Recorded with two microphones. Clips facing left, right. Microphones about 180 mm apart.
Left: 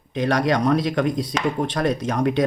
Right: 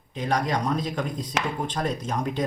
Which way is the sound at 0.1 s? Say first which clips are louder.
Left 6 dB; 75° left (ahead or behind).